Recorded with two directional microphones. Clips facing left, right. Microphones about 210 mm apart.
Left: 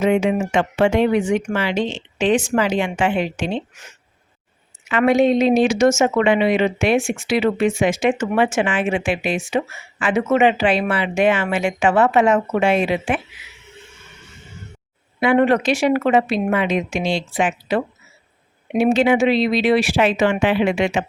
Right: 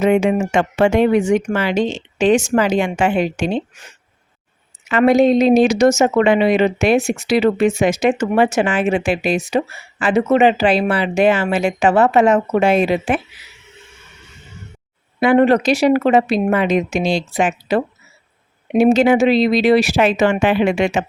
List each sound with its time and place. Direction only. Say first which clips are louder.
0.0 s speech: right 3 dB; 45° right (ahead or behind)
15.2 s speech: right 3 dB; 35° right (ahead or behind)